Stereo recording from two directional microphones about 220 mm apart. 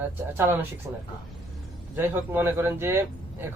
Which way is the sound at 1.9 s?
10° right (ahead or behind).